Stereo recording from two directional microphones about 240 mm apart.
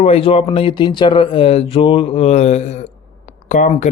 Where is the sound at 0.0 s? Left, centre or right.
Left.